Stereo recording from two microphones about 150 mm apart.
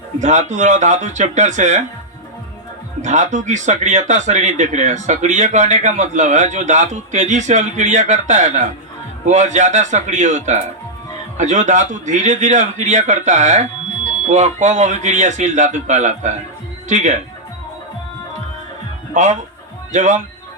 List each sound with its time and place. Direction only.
0.2 s a man's voice: 50° right (ahead or behind)
3.0 s a man's voice: 50° right (ahead or behind)
19.1 s a man's voice: 55° right (ahead or behind)